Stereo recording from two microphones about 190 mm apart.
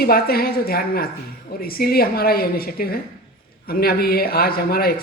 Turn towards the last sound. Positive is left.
turn(degrees=50)  # may be behind; listen again after turning